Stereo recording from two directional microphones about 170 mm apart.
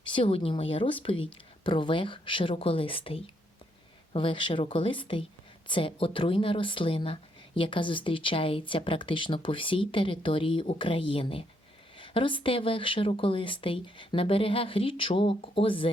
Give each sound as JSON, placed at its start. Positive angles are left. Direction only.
{"t": 0.1, "sound": "speech", "side_deg": 35}